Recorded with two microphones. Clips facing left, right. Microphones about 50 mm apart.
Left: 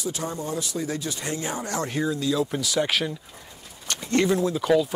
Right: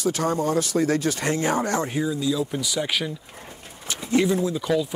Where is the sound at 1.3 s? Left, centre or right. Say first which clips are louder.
Right 6 dB; right.